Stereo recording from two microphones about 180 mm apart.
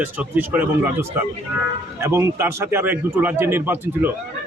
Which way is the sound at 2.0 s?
15° right (ahead or behind).